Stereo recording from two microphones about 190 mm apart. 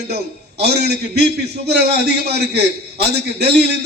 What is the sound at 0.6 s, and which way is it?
A man's voice, 60° right (ahead or behind).